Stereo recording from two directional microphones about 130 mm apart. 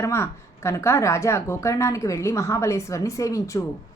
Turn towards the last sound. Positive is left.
turn(degrees=25)  # may be behind; listen again after turning